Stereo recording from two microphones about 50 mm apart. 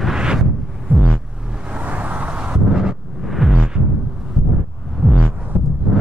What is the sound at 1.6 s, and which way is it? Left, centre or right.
Vehicle, right.